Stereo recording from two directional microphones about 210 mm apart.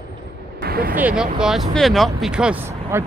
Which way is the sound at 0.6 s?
45° right (ahead or behind).